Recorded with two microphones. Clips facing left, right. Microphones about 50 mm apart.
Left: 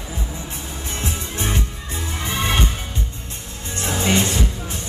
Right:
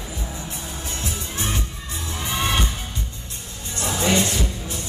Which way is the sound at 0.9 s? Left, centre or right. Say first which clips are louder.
Left 4 dB; left.